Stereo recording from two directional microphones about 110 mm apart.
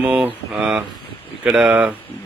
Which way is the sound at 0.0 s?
10° right (ahead or behind).